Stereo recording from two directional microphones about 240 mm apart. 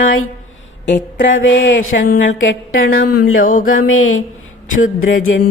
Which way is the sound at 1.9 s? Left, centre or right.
Left.